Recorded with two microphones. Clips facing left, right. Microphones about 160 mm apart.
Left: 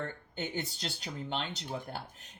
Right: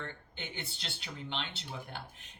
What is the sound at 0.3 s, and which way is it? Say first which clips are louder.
Speech: left 10 dB; 40° left (ahead or behind).